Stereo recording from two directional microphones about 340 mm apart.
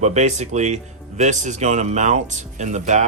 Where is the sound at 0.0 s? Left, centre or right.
Centre.